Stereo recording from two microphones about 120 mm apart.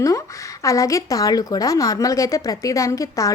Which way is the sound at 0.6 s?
25° left (ahead or behind).